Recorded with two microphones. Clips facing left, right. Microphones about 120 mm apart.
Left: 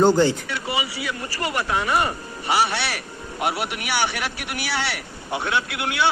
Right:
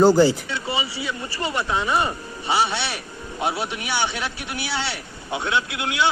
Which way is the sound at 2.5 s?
20° right (ahead or behind).